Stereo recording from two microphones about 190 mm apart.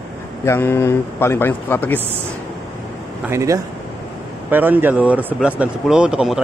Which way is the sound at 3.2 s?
15° right (ahead or behind).